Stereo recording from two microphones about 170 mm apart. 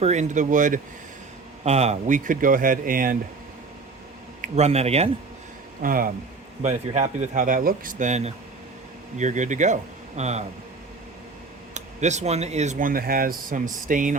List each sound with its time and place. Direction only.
0.0 s speech: 45° right (ahead or behind)
4.4 s speech: 40° right (ahead or behind)
5.8 s speech: 55° right (ahead or behind)
6.6 s speech: 40° right (ahead or behind)
11.7 s speech: 45° right (ahead or behind)